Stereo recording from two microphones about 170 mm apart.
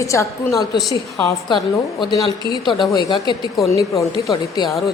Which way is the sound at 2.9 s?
25° left (ahead or behind).